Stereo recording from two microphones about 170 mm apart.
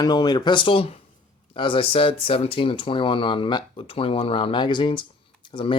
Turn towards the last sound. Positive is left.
turn(degrees=30)  # may be behind; listen again after turning